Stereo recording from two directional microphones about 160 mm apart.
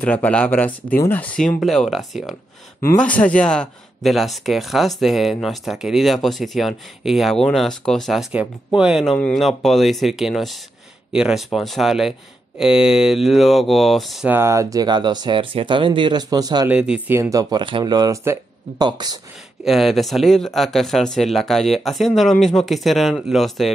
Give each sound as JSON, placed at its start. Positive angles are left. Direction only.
{"t": 0.0, "sound": "speech", "side_deg": 10}
{"t": 14.3, "sound": "speech", "side_deg": -20}
{"t": 16.6, "sound": "speech", "side_deg": -5}
{"t": 17.2, "sound": "speech", "side_deg": -20}
{"t": 19.6, "sound": "speech", "side_deg": 0}